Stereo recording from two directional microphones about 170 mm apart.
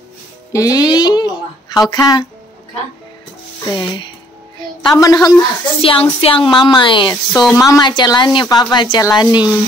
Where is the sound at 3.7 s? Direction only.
25° left (ahead or behind).